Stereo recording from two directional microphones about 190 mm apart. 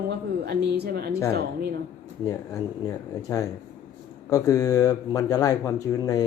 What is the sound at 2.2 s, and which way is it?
Speech, 15° left (ahead or behind).